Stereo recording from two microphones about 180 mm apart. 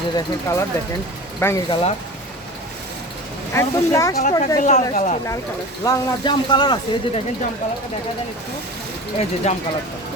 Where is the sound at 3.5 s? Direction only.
15° left (ahead or behind).